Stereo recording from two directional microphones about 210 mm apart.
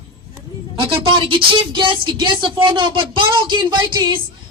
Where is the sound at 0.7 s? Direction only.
25° right (ahead or behind).